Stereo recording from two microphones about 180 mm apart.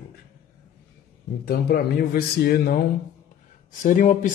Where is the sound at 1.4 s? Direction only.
55° left (ahead or behind).